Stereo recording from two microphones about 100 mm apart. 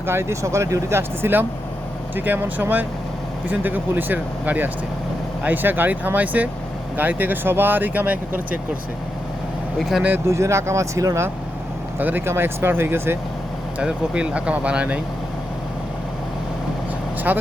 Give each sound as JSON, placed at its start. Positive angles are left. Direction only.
{"t": 0.0, "sound": "speech", "side_deg": -25}
{"t": 10.2, "sound": "speech", "side_deg": -30}
{"t": 11.9, "sound": "speech", "side_deg": -20}
{"t": 13.7, "sound": "speech", "side_deg": -10}
{"t": 17.3, "sound": "speech", "side_deg": -15}